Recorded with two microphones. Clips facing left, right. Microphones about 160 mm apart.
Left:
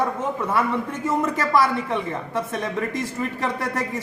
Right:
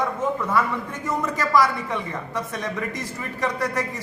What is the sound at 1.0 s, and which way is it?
A man's voice, 25° left (ahead or behind).